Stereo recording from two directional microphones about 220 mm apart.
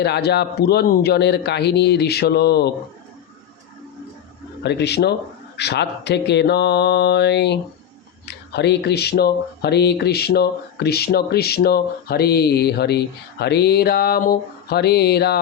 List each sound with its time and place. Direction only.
0.0 s speech: 50° left (ahead or behind)
4.6 s speech: 50° left (ahead or behind)